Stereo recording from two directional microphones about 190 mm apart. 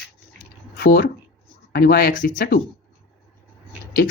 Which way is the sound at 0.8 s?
55° left (ahead or behind).